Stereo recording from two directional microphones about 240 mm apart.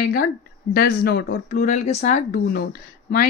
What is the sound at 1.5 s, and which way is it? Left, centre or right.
Speech, left.